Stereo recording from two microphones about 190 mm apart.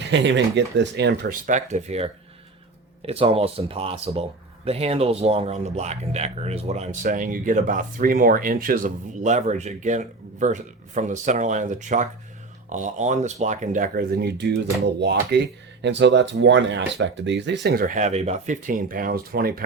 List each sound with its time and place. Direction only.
0.0 s speech: 70° right (ahead or behind)
1.5 s speech: 40° right (ahead or behind)
3.1 s speech: 30° right (ahead or behind); by 19.6 s 50° right (ahead or behind)